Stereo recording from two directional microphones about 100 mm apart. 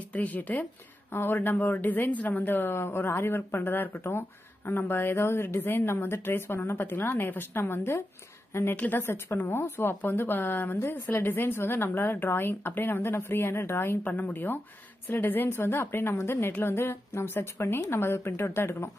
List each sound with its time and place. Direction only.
0.1 s a woman's voice: 15° left (ahead or behind)